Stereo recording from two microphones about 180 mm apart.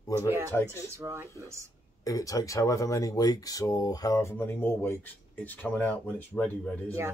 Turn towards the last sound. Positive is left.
turn(degrees=10)  # may be behind; listen again after turning